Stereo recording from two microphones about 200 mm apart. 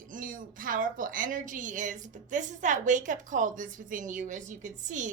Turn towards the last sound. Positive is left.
turn(degrees=-40)  # may be behind; listen again after turning